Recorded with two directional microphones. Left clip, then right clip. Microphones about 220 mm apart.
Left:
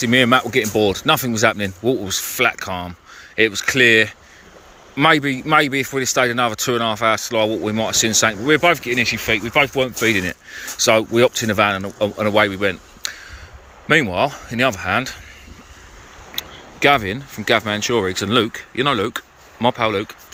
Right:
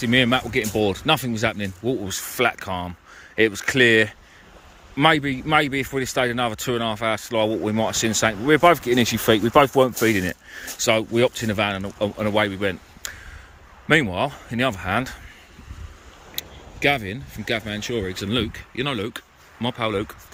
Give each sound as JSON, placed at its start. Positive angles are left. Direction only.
{"t": 0.0, "sound": "speech", "side_deg": -10}
{"t": 16.3, "sound": "speech", "side_deg": -5}